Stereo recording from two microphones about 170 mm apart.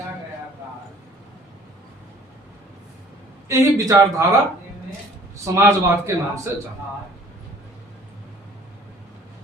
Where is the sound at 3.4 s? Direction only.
20° right (ahead or behind).